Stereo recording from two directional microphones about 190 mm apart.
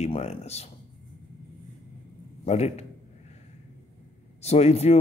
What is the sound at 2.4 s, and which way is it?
Speech, 35° left (ahead or behind).